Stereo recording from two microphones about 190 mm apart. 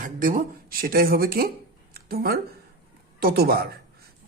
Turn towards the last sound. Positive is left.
turn(degrees=-50)  # may be behind; listen again after turning